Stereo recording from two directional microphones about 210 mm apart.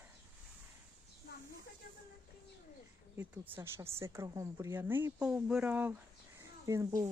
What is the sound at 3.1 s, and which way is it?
Speech, 10° right (ahead or behind).